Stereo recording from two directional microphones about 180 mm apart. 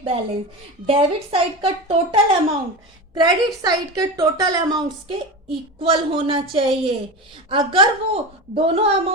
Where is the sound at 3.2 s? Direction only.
25° right (ahead or behind).